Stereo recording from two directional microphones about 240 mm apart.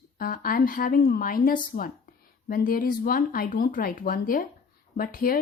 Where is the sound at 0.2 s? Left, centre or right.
Left.